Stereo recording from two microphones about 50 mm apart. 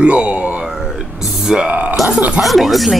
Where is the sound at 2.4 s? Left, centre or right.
Centre.